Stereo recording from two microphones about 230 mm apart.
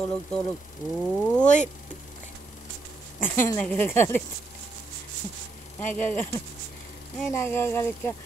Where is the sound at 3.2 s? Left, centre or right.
Centre.